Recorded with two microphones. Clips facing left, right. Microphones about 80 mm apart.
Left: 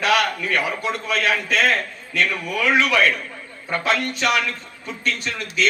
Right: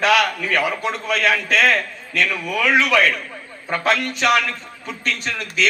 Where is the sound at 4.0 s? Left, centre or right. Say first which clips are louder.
Even; left.